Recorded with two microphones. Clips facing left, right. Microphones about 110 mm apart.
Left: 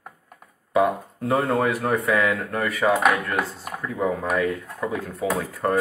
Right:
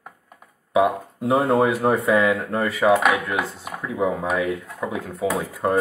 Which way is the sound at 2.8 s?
5° right (ahead or behind).